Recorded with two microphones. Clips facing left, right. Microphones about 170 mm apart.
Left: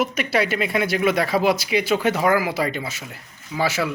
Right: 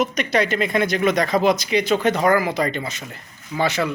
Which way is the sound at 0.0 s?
5° left (ahead or behind).